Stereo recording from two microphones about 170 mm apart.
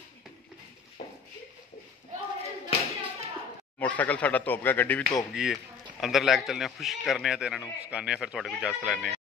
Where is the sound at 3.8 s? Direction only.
10° left (ahead or behind).